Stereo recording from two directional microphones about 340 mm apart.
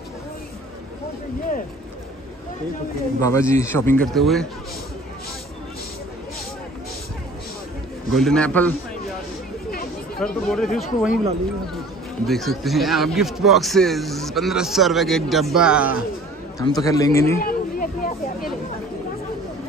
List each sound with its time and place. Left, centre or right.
3.2 s a man's voice: centre
8.1 s a man's voice: centre
10.1 s a man's voice: centre
12.3 s a man's voice: centre
16.5 s a man's voice: centre
17.4 s hubbub: left